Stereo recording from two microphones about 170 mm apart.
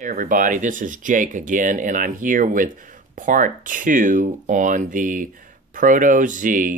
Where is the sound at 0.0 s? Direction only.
50° right (ahead or behind).